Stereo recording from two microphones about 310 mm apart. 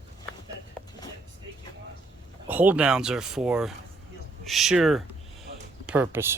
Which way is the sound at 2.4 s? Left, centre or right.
Centre.